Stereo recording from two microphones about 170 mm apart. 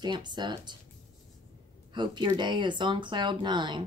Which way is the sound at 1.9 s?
25° right (ahead or behind).